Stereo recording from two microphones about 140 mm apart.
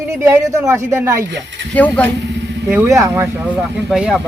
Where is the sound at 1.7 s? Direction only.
10° left (ahead or behind).